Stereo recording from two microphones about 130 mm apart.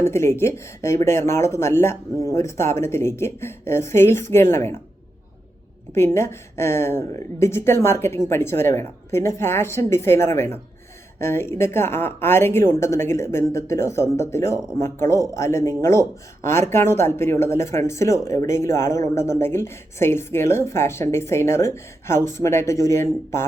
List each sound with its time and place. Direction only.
0.0 s speech: 20° left (ahead or behind)
5.9 s speech: 20° left (ahead or behind)